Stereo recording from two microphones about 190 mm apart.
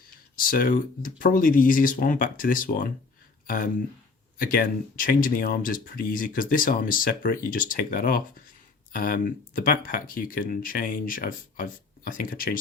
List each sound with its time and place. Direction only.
0.3 s speech: 45° left (ahead or behind)